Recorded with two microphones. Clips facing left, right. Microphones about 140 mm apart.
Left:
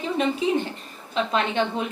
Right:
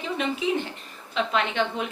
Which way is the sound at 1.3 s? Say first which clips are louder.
Left 2 dB; 35° left (ahead or behind).